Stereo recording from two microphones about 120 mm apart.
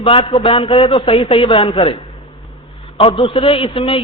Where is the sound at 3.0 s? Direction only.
50° left (ahead or behind).